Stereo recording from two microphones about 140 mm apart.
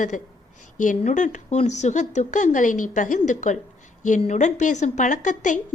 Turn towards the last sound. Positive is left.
turn(degrees=65)  # may be behind; listen again after turning